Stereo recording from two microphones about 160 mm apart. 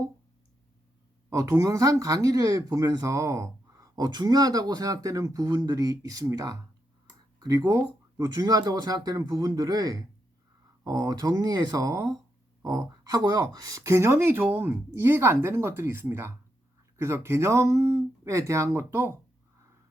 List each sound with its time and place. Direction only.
1.3 s speech: 20° right (ahead or behind)